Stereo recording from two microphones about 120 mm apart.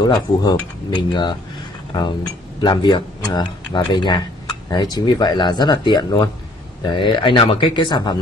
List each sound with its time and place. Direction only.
0.0 s speech: 35° left (ahead or behind)
2.6 s speech: 40° left (ahead or behind)